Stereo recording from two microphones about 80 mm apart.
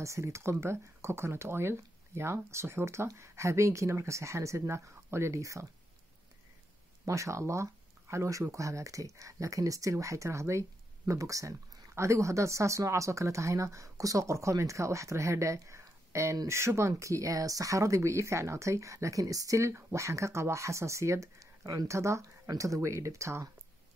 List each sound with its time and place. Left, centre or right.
0.0 s speech: right
7.1 s speech: right